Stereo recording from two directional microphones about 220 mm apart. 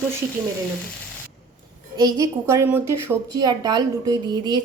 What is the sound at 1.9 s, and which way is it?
A woman's voice, 15° right (ahead or behind).